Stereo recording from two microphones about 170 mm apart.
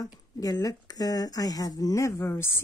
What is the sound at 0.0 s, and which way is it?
Speech, 20° left (ahead or behind).